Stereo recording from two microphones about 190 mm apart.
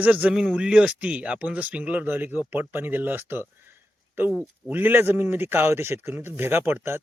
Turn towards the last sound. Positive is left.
turn(degrees=-10)  # may be behind; listen again after turning